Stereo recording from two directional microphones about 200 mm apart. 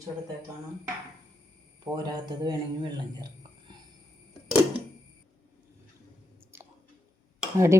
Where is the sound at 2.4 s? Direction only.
20° right (ahead or behind).